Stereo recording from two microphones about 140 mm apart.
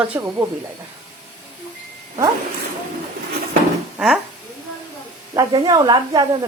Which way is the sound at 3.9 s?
5° right (ahead or behind).